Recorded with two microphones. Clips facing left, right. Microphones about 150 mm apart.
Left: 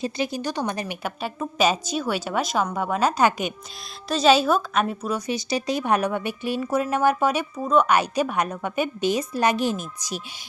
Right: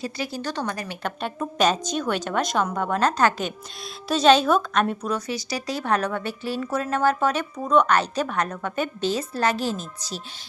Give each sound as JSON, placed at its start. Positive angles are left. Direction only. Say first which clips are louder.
{"t": 0.0, "sound": "a woman's voice", "louder": "left 3 dB", "side_deg": 20}
{"t": 1.0, "sound": "a woman's voice", "louder": "right 4 dB", "side_deg": 5}